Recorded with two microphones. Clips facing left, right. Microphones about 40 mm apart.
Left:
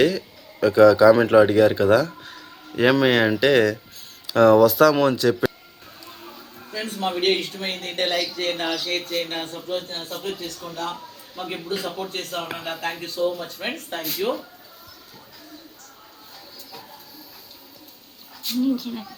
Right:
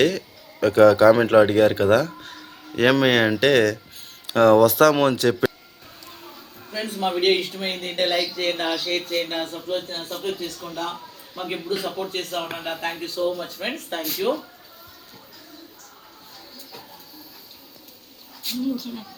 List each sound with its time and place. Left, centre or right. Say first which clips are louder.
0.6 s speech: left 1 dB; right
1.1 s speech: left 1 dB; centre
1.5 s speech: left 1 dB; right
6.7 s a man's voice: right 1 dB; centre
18.6 s speech: left 4 dB; left